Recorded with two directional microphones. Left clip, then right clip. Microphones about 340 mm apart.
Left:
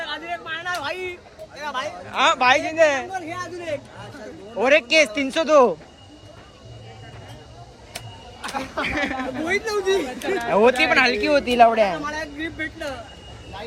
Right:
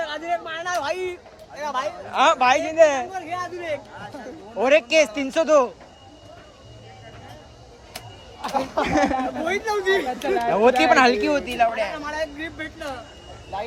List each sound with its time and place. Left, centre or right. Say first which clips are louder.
0.0 s a sound: right 3 dB; right
1.5 s speech: right 2 dB; right
2.0 s speech: even; centre
7.9 s a sound: left 1 dB; right
8.8 s speech: right 3 dB; centre
10.1 s speech: right 3 dB; right
10.5 s speech: even; centre
12.0 s speech: right 1 dB; centre